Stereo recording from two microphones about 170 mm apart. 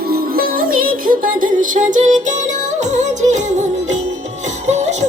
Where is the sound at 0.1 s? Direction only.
60° right (ahead or behind).